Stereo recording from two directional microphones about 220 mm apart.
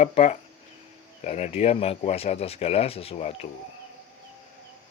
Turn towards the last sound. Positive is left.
turn(degrees=30)  # may be behind; listen again after turning